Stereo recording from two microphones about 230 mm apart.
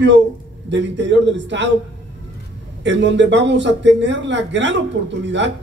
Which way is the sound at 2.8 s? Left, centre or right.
Right.